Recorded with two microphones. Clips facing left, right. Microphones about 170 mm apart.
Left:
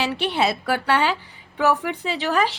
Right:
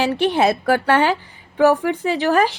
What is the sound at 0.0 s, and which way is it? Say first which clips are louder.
Speech: right 5 dB; 45° right (ahead or behind).